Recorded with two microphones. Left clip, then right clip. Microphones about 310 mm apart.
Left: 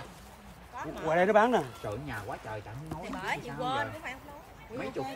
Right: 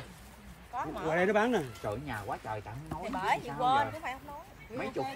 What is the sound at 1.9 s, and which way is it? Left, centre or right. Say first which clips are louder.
A woman's voice: right 1 dB; centre.